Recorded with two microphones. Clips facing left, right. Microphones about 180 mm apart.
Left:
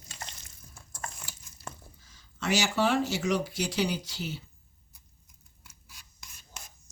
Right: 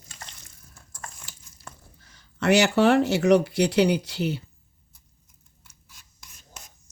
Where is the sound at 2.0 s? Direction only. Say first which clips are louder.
Right 9 dB; 65° right (ahead or behind).